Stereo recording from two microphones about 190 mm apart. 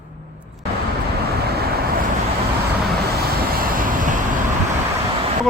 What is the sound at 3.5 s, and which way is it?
Vehicle, 50° right (ahead or behind).